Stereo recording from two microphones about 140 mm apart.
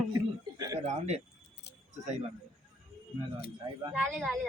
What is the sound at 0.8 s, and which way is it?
Speech, 50° right (ahead or behind).